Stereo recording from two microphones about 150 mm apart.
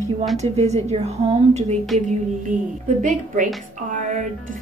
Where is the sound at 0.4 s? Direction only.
45° right (ahead or behind).